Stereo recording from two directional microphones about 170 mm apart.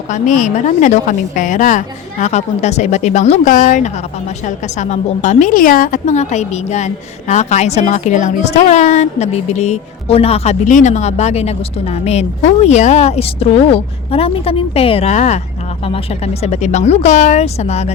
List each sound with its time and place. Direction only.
0.1 s a woman's voice: 50° left (ahead or behind)